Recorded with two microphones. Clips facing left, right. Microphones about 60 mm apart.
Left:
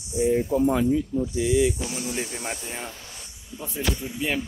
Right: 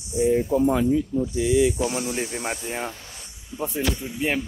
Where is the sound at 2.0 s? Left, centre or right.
Right.